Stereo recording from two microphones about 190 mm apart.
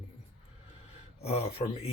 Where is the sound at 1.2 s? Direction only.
30° left (ahead or behind).